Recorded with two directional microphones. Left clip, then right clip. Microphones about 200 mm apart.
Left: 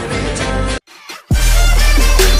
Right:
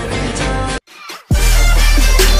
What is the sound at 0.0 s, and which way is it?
Music, centre (ahead or behind).